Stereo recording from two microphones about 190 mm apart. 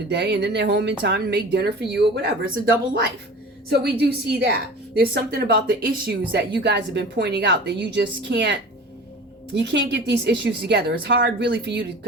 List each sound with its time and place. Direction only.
0.1 s speech: 65° right (ahead or behind)
3.7 s speech: 60° right (ahead or behind)
9.6 s speech: 65° right (ahead or behind)